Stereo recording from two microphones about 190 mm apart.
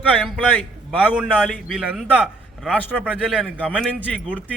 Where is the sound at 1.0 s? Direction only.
5° right (ahead or behind).